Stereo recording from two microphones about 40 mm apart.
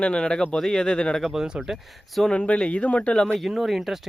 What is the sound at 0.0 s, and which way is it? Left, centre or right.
Speech, left.